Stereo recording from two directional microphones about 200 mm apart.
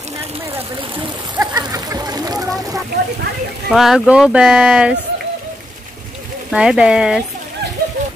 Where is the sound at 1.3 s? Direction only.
15° right (ahead or behind).